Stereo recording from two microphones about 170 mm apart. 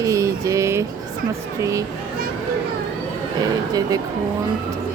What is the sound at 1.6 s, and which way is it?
Speech, 20° right (ahead or behind).